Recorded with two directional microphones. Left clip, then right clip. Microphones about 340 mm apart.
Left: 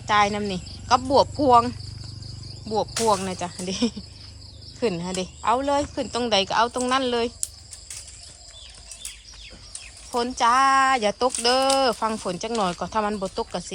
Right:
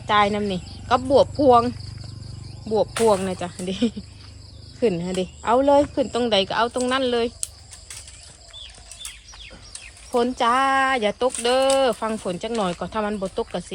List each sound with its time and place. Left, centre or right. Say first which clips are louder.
0.1 s speech: right 1 dB; centre
10.1 s speech: right 1 dB; centre